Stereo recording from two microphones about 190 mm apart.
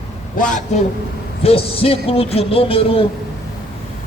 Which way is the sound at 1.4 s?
30° left (ahead or behind).